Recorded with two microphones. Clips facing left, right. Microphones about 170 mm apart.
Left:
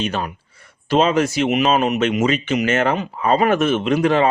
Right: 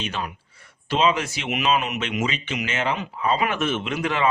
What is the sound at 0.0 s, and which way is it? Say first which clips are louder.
Speech: left 6 dB; 40° left (ahead or behind).